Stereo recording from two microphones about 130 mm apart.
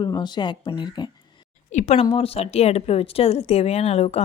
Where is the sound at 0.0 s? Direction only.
35° left (ahead or behind).